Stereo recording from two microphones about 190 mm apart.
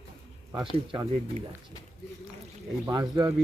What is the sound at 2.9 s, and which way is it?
Speech, 20° right (ahead or behind).